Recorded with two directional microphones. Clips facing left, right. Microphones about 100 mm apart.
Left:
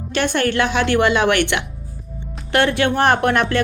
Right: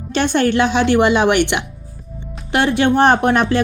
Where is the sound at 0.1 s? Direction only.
25° right (ahead or behind).